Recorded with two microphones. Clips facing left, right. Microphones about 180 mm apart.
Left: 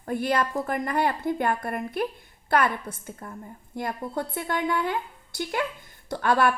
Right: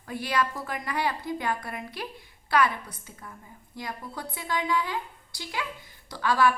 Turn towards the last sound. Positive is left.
turn(degrees=55)  # may be behind; listen again after turning